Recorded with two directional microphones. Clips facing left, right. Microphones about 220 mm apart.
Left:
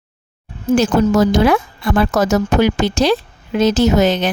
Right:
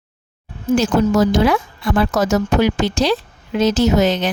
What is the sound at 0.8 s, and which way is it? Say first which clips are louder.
A woman's voice: left 2 dB; 55° left (ahead or behind).